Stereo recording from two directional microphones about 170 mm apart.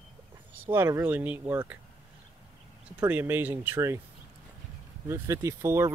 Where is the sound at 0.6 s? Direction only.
15° right (ahead or behind).